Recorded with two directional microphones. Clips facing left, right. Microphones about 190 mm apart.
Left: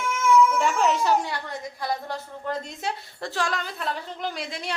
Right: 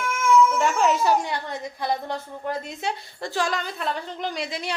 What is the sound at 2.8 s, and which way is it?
A woman's voice, centre (ahead or behind).